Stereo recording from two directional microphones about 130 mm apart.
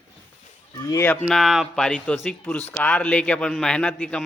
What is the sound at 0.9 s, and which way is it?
Speech, 25° left (ahead or behind).